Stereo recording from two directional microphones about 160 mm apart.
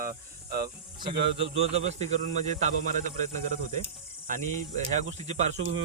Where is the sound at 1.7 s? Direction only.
45° right (ahead or behind).